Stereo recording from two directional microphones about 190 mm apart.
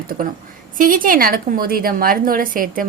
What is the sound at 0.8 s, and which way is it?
A woman's voice, 45° right (ahead or behind).